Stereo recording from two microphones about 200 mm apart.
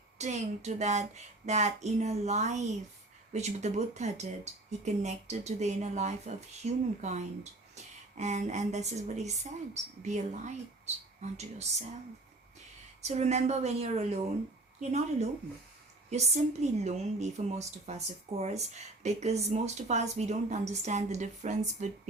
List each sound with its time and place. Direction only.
0.2 s a woman's voice: 35° right (ahead or behind)
13.0 s a woman's voice: 35° right (ahead or behind)